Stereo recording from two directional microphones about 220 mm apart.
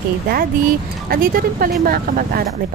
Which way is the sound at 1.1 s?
40° right (ahead or behind).